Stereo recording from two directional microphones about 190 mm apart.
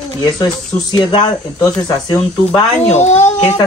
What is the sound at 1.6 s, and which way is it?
Speech, 20° left (ahead or behind).